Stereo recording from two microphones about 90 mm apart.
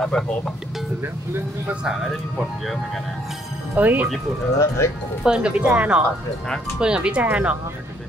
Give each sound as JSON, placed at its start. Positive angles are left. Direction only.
{"t": 0.1, "sound": "speech", "side_deg": 10}
{"t": 1.7, "sound": "speech", "side_deg": -5}
{"t": 3.7, "sound": "speech", "side_deg": -20}
{"t": 4.6, "sound": "speech", "side_deg": 30}
{"t": 5.2, "sound": "speech", "side_deg": -10}